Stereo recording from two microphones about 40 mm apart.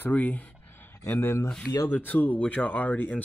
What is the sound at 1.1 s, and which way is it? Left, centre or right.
Speech, left.